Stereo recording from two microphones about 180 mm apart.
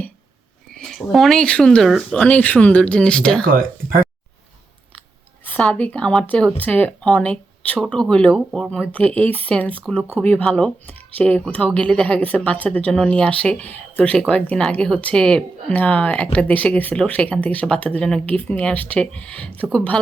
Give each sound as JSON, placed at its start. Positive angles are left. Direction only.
{"t": 0.7, "sound": "speech", "side_deg": 0}
{"t": 3.5, "sound": "speech", "side_deg": -50}
{"t": 5.5, "sound": "speech", "side_deg": 10}